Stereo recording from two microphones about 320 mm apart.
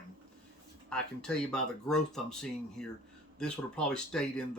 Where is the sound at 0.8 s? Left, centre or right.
Centre.